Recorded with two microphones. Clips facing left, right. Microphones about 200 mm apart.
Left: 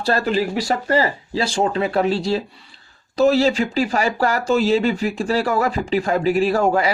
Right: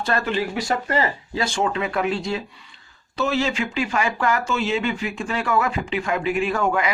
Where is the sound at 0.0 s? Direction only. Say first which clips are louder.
Left 4 dB; 35° left (ahead or behind).